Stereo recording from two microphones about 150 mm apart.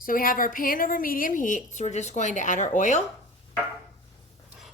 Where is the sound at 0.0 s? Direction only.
70° left (ahead or behind).